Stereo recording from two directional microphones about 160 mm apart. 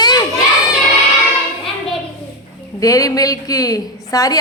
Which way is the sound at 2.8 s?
20° left (ahead or behind).